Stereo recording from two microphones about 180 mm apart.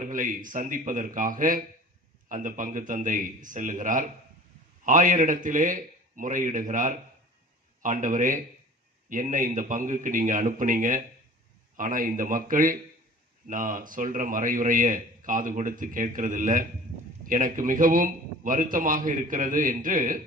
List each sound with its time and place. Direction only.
0.0 s a man's voice: 50° right (ahead or behind)